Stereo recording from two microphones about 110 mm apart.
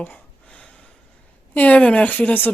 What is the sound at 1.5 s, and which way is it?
Speech, 15° left (ahead or behind).